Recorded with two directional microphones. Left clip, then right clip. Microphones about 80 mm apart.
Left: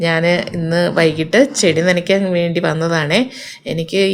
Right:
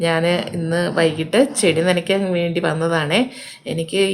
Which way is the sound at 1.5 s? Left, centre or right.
Centre.